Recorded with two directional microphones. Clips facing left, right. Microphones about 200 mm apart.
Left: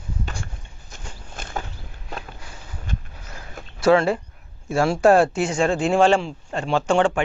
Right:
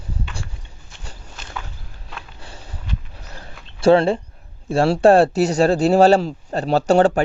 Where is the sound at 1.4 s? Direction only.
50° left (ahead or behind).